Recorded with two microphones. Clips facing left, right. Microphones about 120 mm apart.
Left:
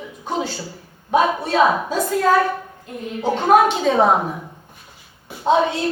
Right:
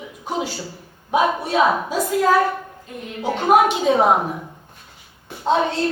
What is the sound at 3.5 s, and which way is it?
Speech, 10° right (ahead or behind).